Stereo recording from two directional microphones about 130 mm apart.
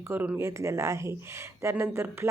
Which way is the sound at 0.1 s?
15° right (ahead or behind).